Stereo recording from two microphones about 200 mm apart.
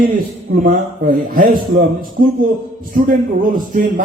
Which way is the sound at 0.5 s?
45° right (ahead or behind).